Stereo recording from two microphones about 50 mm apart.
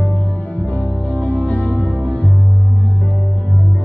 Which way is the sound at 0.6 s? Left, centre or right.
Left.